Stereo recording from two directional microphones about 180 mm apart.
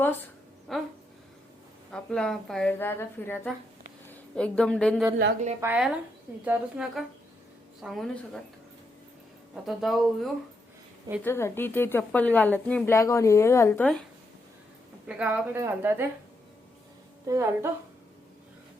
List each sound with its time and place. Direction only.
0.0 s a woman's voice: 10° left (ahead or behind)
1.9 s a woman's voice: 5° left (ahead or behind)
5.5 s a woman's voice: 10° right (ahead or behind)
9.6 s a woman's voice: centre (ahead or behind)
11.2 s a woman's voice: 15° left (ahead or behind)
15.0 s a woman's voice: 5° right (ahead or behind)
17.2 s speech: 15° right (ahead or behind)